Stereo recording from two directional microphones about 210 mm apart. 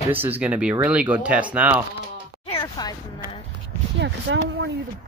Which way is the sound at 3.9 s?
55° right (ahead or behind).